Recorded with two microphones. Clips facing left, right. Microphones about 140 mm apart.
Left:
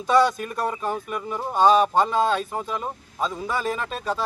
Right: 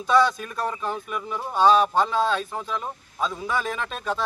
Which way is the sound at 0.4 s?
15° left (ahead or behind).